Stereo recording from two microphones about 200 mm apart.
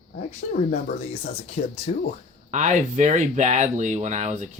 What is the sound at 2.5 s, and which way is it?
Speech, 35° right (ahead or behind).